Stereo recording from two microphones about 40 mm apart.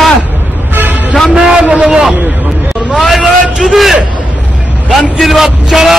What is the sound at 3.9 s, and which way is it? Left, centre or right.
Hubbub, right.